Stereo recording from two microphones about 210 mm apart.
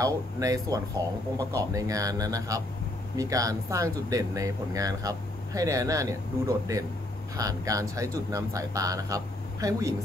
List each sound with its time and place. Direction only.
0.0 s speech: 15° right (ahead or behind)